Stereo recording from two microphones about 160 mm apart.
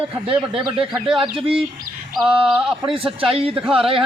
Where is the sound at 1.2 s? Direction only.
35° right (ahead or behind).